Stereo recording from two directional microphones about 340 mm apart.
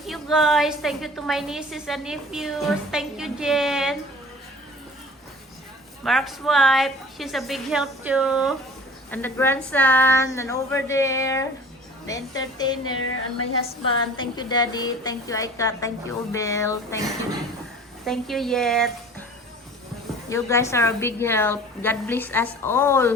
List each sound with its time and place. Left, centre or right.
0.0 s a woman's voice: centre
6.1 s a woman's voice: centre
12.8 s speech: left
14.2 s a woman's voice: centre
18.0 s a woman's voice: centre
20.3 s a woman's voice: centre